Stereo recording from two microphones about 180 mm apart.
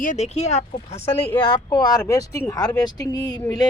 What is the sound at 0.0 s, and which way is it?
Speech, 40° left (ahead or behind).